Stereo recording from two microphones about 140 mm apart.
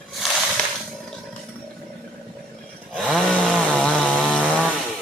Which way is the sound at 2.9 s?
5° left (ahead or behind).